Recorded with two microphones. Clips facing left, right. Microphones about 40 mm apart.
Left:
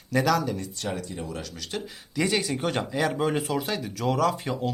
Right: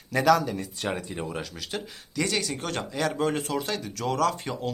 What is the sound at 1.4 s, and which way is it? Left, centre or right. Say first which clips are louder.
Speech: even; centre.